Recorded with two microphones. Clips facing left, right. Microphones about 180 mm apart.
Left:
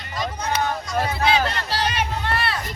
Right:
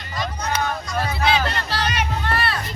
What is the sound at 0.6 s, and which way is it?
Music, 25° left (ahead or behind).